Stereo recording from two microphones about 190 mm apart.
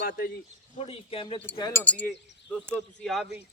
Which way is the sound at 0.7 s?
30° left (ahead or behind).